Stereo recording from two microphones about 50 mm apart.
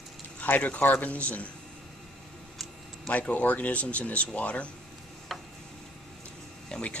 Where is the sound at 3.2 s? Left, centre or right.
Left.